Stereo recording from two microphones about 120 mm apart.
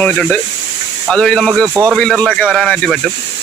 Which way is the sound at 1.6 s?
15° right (ahead or behind).